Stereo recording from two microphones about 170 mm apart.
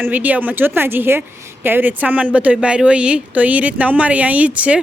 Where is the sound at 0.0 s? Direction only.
10° right (ahead or behind).